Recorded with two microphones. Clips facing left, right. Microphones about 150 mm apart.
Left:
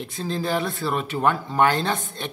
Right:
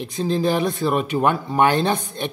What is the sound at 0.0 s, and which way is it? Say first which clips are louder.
Speech: right 6 dB; 15° right (ahead or behind).